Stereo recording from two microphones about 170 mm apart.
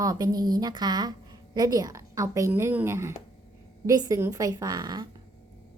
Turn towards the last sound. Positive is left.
turn(degrees=-25)  # may be behind; listen again after turning